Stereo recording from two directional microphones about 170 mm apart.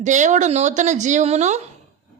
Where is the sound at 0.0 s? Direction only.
45° right (ahead or behind).